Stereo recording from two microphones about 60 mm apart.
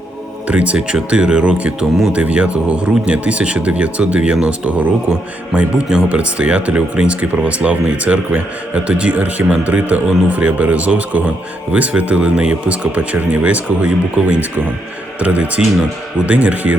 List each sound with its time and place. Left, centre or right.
0.4 s speech: right
15.2 s speech: right